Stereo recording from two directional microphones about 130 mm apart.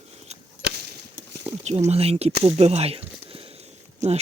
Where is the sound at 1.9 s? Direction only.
50° right (ahead or behind).